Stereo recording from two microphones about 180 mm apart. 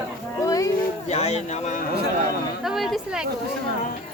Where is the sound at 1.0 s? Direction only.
35° left (ahead or behind).